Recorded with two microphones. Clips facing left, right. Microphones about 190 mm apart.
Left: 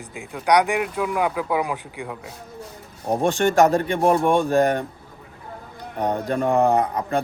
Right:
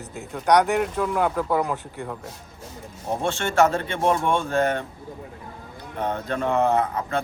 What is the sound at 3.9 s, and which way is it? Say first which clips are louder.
Speech: left 4 dB; 40° left (ahead or behind).